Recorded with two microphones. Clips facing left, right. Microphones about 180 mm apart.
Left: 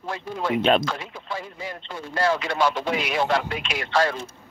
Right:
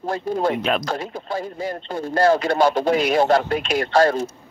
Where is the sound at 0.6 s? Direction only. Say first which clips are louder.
Left 3 dB; 25° left (ahead or behind).